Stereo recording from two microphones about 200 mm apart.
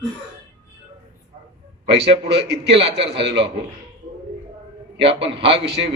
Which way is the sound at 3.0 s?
60° right (ahead or behind).